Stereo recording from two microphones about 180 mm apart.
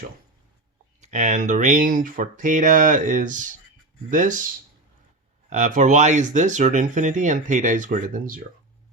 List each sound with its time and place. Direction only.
1.0 s speech: 40° right (ahead or behind)